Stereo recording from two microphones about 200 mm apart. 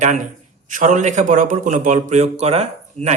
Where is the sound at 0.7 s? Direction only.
40° right (ahead or behind).